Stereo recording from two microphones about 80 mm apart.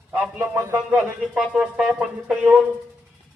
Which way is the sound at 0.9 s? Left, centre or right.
Centre.